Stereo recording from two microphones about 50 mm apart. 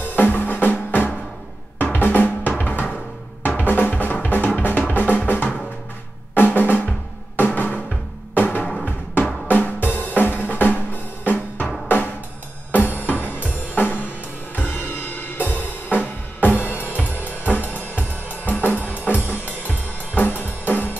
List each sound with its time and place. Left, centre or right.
0.0 s music: left
1.8 s drum: left
2.6 s music: left
6.3 s drum: left
7.3 s music: left
8.8 s drum: left
12.9 s music: left
17.2 s drum kit: left